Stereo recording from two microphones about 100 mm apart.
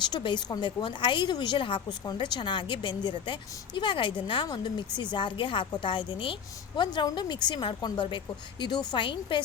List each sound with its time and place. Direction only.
0.0 s a woman's voice: 50° left (ahead or behind)